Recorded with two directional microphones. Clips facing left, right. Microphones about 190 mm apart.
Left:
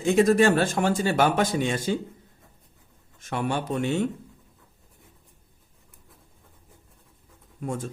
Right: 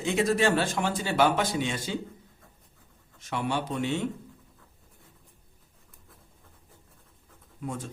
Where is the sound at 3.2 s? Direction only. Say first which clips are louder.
Left 2 dB; 50° left (ahead or behind).